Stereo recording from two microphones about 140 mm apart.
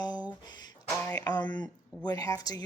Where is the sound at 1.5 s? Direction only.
30° left (ahead or behind).